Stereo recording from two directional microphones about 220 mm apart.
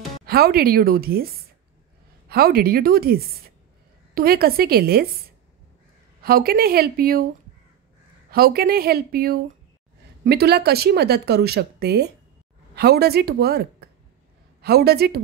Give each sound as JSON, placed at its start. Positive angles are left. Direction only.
{"t": 0.2, "sound": "speech", "side_deg": -45}
{"t": 6.2, "sound": "speech", "side_deg": -45}
{"t": 8.3, "sound": "speech", "side_deg": -45}